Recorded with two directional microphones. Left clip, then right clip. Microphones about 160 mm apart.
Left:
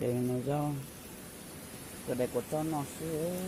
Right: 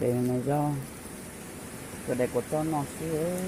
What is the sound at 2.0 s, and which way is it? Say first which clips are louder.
Speech: right 5 dB; 5° left (ahead or behind).